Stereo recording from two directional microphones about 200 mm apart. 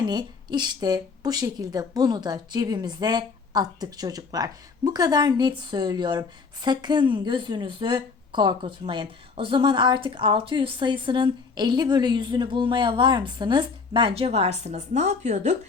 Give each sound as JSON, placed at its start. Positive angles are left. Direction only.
{"t": 0.0, "sound": "speech", "side_deg": -20}